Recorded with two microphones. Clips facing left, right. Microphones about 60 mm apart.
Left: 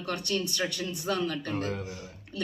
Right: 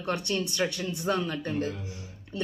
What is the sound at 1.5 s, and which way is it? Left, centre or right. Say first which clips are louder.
Speech: right 1 dB; left.